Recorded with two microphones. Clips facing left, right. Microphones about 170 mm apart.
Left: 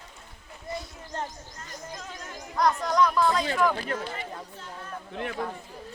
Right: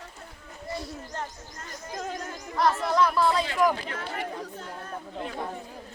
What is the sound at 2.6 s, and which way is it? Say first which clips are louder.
Speech: even; 5° right (ahead or behind).